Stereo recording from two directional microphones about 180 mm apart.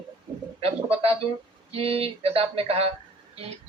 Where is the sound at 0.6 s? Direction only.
35° right (ahead or behind).